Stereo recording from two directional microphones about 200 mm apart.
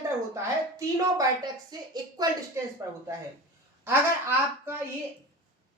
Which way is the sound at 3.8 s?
10° right (ahead or behind).